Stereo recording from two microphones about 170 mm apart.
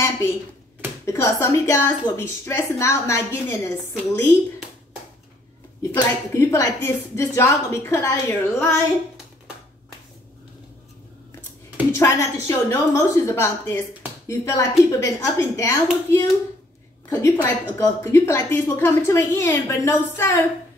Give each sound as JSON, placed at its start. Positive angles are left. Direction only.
{"t": 1.0, "sound": "a woman's voice", "side_deg": 15}
{"t": 5.9, "sound": "a woman's voice", "side_deg": 15}
{"t": 11.9, "sound": "a woman's voice", "side_deg": 15}